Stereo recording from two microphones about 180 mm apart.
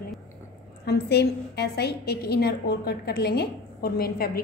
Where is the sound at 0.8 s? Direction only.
65° left (ahead or behind).